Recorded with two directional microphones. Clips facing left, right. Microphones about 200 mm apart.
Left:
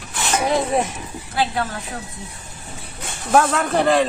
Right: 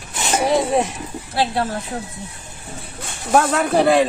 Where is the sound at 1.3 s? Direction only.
30° right (ahead or behind).